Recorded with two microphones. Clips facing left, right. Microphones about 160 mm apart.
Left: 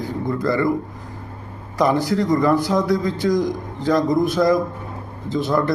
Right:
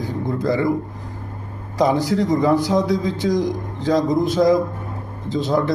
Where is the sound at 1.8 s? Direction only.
15° right (ahead or behind).